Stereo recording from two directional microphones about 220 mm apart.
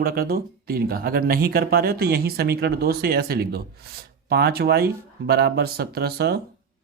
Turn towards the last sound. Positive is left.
turn(degrees=-45)  # may be behind; listen again after turning